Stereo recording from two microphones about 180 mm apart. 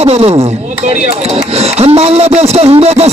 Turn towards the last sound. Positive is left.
turn(degrees=-35)  # may be behind; listen again after turning